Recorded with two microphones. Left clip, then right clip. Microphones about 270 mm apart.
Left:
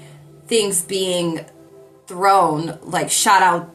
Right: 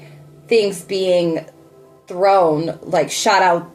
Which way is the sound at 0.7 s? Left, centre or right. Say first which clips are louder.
Right 4 dB; centre.